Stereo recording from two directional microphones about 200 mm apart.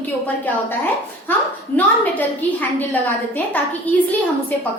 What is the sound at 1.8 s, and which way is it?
Speech, 10° left (ahead or behind).